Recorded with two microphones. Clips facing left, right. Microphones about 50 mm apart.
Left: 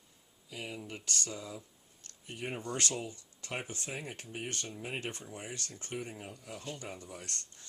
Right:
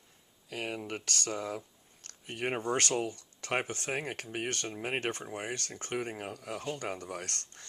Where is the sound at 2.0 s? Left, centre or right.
Right.